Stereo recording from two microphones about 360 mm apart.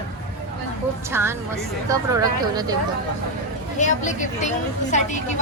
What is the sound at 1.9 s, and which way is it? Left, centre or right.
Speech, centre.